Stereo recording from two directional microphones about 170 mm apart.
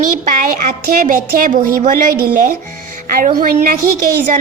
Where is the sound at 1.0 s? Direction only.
55° right (ahead or behind).